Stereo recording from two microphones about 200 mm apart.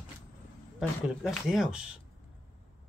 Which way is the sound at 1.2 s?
Centre (ahead or behind).